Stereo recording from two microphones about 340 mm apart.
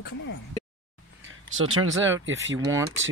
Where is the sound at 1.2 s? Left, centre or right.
Right.